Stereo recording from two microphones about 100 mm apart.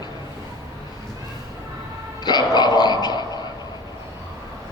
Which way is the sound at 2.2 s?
45° left (ahead or behind).